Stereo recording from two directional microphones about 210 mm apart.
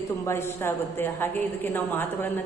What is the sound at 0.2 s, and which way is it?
A woman's voice, 10° left (ahead or behind).